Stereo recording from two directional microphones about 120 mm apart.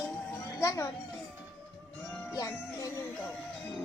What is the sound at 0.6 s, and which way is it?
Speech, 25° left (ahead or behind).